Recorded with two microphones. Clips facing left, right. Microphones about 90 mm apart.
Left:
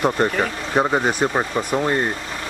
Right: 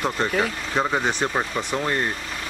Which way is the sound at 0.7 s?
15° left (ahead or behind).